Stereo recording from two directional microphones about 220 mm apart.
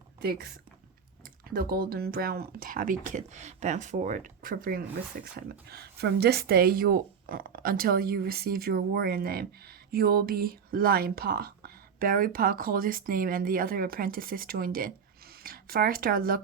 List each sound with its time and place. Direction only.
0.2 s speech: 45° right (ahead or behind)